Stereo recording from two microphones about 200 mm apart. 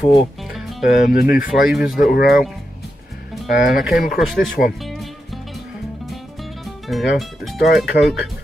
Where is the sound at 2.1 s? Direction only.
50° left (ahead or behind).